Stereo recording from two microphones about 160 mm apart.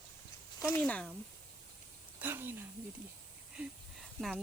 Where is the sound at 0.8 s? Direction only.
5° left (ahead or behind).